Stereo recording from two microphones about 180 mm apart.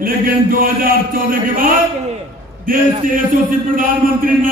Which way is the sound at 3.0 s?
50° right (ahead or behind).